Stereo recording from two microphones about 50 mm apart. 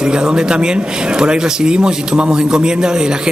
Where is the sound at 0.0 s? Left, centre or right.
Centre.